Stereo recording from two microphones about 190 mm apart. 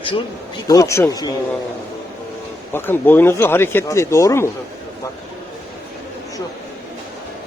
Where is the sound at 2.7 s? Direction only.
10° left (ahead or behind).